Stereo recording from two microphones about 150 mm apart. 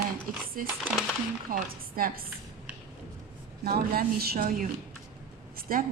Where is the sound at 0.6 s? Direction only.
70° right (ahead or behind).